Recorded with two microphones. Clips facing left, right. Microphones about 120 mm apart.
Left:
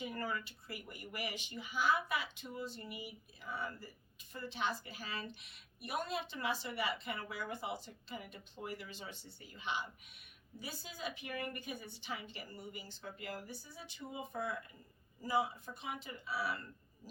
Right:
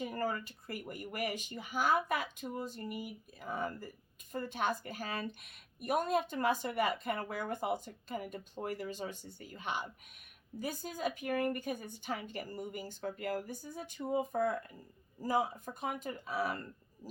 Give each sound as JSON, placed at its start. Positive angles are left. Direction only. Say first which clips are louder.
{"t": 0.0, "sound": "speech", "louder": "right 5 dB", "side_deg": -40}